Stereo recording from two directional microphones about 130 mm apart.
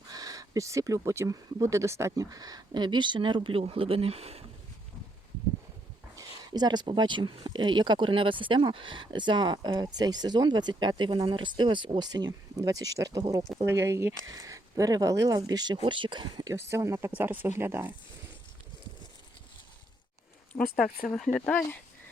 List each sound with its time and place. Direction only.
0.1 s speech: 30° right (ahead or behind); by 4.4 s 50° right (ahead or behind)
6.1 s speech: 30° right (ahead or behind)
16.5 s speech: 20° right (ahead or behind)
20.5 s speech: 5° left (ahead or behind)